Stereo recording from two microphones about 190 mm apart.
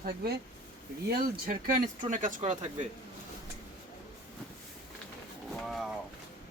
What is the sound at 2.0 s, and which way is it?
Speech, 45° right (ahead or behind).